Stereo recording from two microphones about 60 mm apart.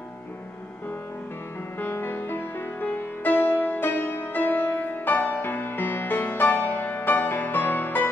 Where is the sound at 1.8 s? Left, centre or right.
Left.